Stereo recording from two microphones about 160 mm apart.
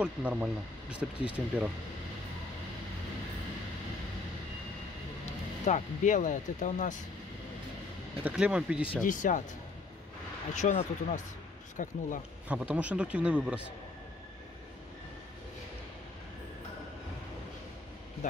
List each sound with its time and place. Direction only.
0.0 s speech: 5° right (ahead or behind)
5.7 s speech: 50° left (ahead or behind)
8.2 s speech: 10° right (ahead or behind)
9.0 s speech: 55° left (ahead or behind)
10.5 s speech: 45° left (ahead or behind)
12.4 s speech: 10° right (ahead or behind)